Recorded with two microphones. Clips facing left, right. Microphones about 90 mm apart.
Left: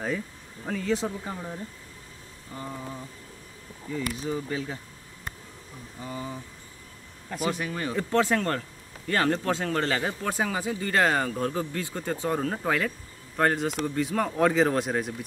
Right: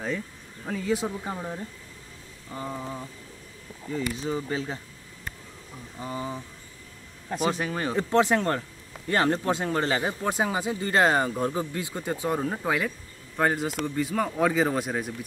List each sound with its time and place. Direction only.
0.7 s speech: 10° right (ahead or behind)
1.2 s speech: 25° right (ahead or behind)
5.9 s speech: 30° right (ahead or behind); by 15.1 s centre (ahead or behind)